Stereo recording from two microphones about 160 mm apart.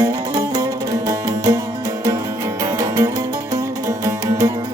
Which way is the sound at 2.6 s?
20° right (ahead or behind).